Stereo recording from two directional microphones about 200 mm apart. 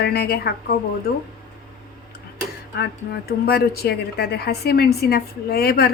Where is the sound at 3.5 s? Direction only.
50° left (ahead or behind).